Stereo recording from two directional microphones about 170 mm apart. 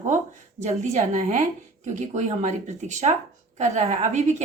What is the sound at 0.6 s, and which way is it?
A woman's voice, 40° right (ahead or behind).